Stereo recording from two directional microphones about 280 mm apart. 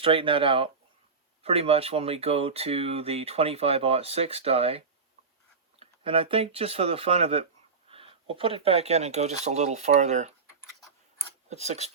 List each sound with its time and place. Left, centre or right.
0.0 s speech: centre
5.8 s speech: centre
11.4 s speech: right